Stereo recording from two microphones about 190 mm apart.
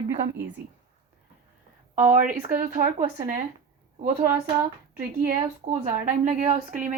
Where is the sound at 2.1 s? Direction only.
45° right (ahead or behind).